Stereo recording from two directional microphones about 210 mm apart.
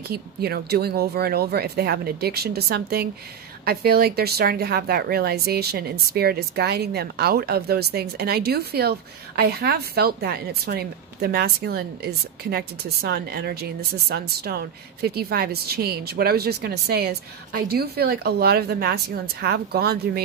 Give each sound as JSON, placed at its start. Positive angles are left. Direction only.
{"t": 0.1, "sound": "speech", "side_deg": -50}